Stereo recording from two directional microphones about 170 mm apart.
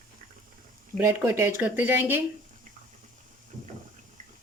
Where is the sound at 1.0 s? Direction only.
15° right (ahead or behind).